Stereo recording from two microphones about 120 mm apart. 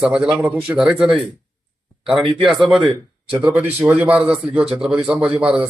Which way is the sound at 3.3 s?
15° right (ahead or behind).